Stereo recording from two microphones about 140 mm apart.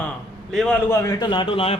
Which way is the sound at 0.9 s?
25° left (ahead or behind).